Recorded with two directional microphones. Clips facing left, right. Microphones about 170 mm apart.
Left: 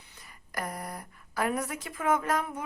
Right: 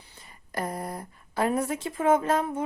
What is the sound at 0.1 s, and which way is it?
Speech, 25° right (ahead or behind).